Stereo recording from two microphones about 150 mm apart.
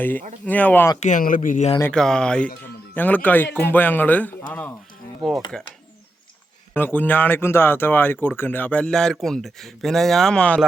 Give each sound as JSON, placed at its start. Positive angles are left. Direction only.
{"t": 0.4, "sound": "speech", "side_deg": 10}
{"t": 0.9, "sound": "a man's voice", "side_deg": 55}
{"t": 1.8, "sound": "speech", "side_deg": 5}
{"t": 6.7, "sound": "speech", "side_deg": 10}